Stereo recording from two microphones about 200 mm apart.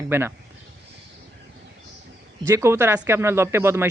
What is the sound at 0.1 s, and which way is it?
Speech, 10° right (ahead or behind).